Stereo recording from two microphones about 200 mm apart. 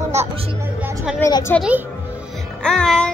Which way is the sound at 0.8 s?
10° right (ahead or behind).